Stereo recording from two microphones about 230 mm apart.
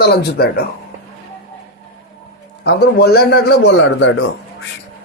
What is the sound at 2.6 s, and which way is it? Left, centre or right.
A man's voice, left.